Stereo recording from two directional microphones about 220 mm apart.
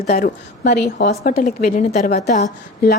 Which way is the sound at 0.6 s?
50° left (ahead or behind).